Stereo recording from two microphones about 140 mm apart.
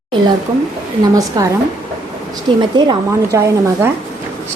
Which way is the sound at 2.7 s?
35° right (ahead or behind).